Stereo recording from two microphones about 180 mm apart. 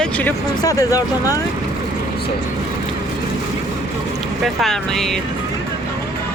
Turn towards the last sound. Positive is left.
turn(degrees=0)  # may be behind; listen again after turning